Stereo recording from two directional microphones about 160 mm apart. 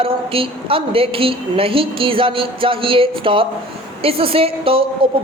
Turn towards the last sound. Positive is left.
turn(degrees=-35)  # may be behind; listen again after turning